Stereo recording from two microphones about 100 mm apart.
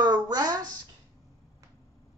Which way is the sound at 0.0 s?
40° right (ahead or behind).